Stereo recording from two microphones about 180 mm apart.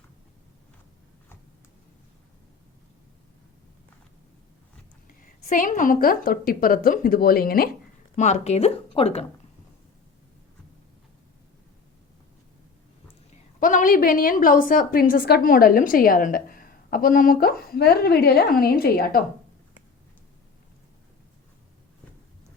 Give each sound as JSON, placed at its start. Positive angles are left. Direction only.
{"t": 5.0, "sound": "a woman's voice", "side_deg": 50}
{"t": 8.1, "sound": "speech", "side_deg": 40}
{"t": 13.3, "sound": "a woman's voice", "side_deg": 45}